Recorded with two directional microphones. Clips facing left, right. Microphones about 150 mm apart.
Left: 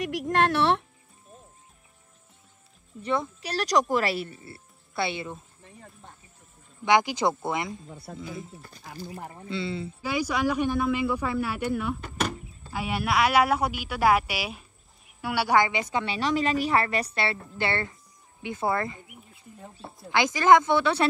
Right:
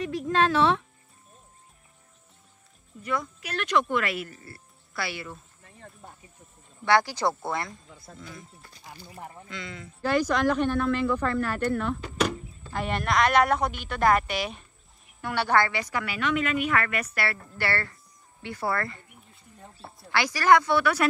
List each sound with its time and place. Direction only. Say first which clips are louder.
0.4 s speech: right 1 dB; 65° left (ahead or behind)
3.0 s a woman's voice: left 3 dB; 30° left (ahead or behind)
6.8 s a woman's voice: left 1 dB; 15° left (ahead or behind)
8.1 s speech: left 6 dB; 55° left (ahead or behind)
9.5 s a woman's voice: left 12 dB; 30° left (ahead or behind)
10.0 s a woman's voice: right 3 dB; 10° left (ahead or behind); by 21.1 s 25° left (ahead or behind)